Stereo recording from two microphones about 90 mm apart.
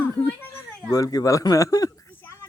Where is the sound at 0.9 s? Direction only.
45° left (ahead or behind).